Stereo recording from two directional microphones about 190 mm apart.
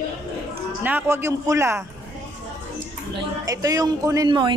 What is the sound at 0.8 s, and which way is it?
A man's voice, 10° right (ahead or behind).